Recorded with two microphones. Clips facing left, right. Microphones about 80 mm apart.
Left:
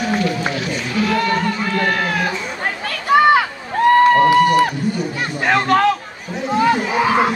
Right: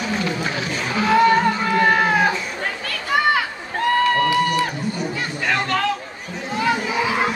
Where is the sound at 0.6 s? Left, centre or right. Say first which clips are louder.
Left 2 dB; right.